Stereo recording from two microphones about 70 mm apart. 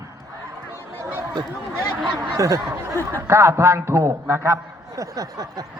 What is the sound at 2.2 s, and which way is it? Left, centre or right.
A man's voice, right.